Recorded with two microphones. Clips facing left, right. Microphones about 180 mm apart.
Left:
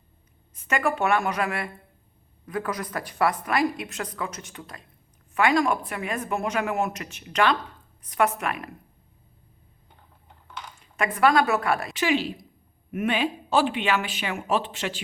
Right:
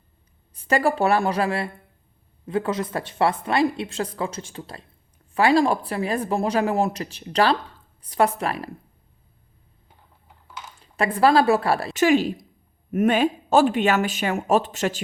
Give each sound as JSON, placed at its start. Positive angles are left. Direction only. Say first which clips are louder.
{"t": 0.5, "sound": "a woman's voice", "louder": "right 5 dB", "side_deg": -35}
{"t": 10.2, "sound": "typing", "louder": "even", "side_deg": -5}
{"t": 10.8, "sound": "a woman's voice", "louder": "right 3 dB", "side_deg": -35}
{"t": 11.9, "sound": "speech", "louder": "right 6 dB", "side_deg": -45}